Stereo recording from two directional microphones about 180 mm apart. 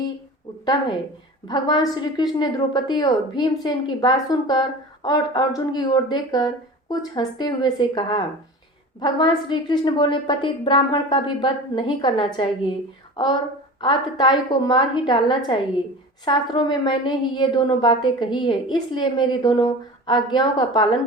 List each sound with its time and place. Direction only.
0.6 s a woman's voice: 25° left (ahead or behind)
13.8 s a woman's voice: 25° left (ahead or behind)